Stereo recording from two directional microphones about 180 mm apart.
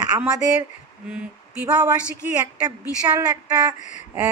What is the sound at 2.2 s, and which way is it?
A woman's voice, 10° right (ahead or behind).